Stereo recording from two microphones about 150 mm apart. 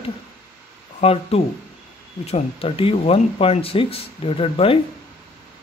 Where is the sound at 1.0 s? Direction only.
40° left (ahead or behind).